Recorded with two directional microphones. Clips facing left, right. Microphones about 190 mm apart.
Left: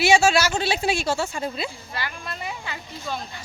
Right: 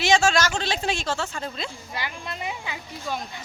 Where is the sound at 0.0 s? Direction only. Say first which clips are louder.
Left 2 dB; 10° left (ahead or behind).